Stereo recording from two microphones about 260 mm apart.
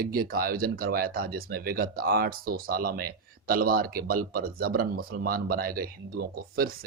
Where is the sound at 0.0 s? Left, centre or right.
Right.